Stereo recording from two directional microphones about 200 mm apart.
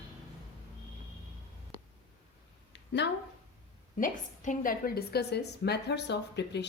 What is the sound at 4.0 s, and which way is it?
A woman's voice, 40° left (ahead or behind).